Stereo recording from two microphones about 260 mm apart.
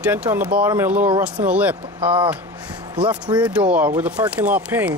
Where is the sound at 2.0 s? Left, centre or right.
Right.